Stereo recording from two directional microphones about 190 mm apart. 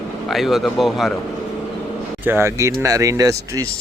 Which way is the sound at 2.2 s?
10° right (ahead or behind).